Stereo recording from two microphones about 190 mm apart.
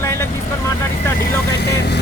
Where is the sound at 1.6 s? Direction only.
60° left (ahead or behind).